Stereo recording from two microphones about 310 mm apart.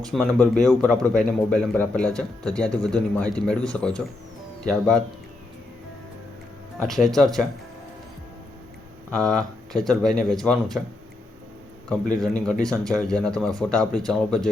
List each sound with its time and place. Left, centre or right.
0.0 s speech: centre
6.7 s speech: centre
9.0 s speech: centre
12.2 s speech: centre